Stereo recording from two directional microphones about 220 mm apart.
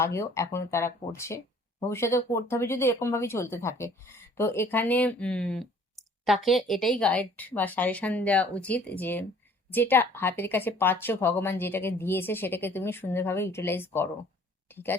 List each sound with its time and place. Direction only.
0.0 s a woman's voice: 10° left (ahead or behind)